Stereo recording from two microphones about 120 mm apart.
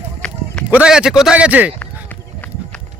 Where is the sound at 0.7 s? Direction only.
10° right (ahead or behind).